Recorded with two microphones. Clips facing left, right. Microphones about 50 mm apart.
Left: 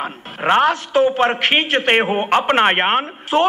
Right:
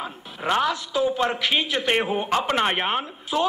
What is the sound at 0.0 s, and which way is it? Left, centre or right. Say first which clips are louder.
A man's voice: left 7 dB; left.